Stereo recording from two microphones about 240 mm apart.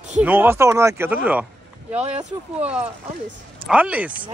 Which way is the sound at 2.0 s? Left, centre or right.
Right.